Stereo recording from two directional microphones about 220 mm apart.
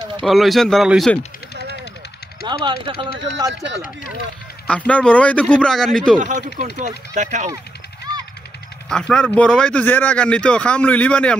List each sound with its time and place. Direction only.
0.2 s speech: centre (ahead or behind)
2.4 s speech: 20° right (ahead or behind)
4.6 s speech: 5° left (ahead or behind)
6.1 s speech: 35° right (ahead or behind)
8.8 s speech: 5° left (ahead or behind)